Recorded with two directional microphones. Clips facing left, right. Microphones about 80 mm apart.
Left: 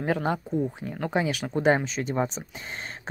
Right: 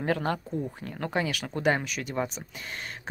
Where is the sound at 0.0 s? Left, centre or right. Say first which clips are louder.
Left 2 dB; centre.